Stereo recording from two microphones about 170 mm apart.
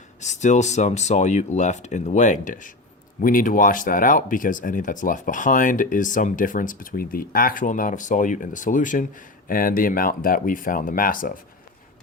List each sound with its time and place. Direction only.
0.2 s speech: 45° left (ahead or behind)